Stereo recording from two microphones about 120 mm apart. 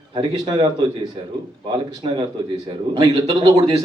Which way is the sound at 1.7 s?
40° right (ahead or behind).